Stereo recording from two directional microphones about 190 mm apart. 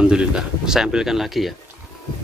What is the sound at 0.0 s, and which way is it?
Speech, 5° right (ahead or behind).